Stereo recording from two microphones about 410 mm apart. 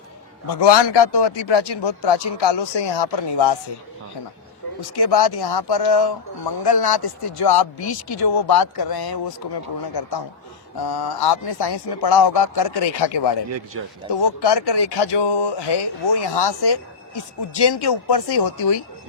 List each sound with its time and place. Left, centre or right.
0.4 s a man's voice: left
4.8 s a man's voice: left